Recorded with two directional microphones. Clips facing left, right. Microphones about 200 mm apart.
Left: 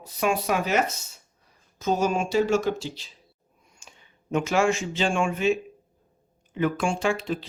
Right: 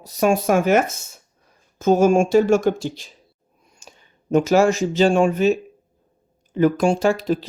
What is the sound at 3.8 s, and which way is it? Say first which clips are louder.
Speech: right 6 dB; 40° right (ahead or behind).